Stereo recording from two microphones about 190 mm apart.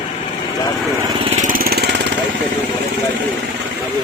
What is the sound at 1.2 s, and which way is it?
Lawn mower, 40° right (ahead or behind).